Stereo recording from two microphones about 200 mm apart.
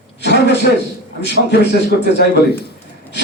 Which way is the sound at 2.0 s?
55° left (ahead or behind).